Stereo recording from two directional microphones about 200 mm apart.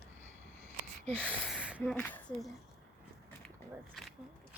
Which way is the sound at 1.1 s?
10° right (ahead or behind).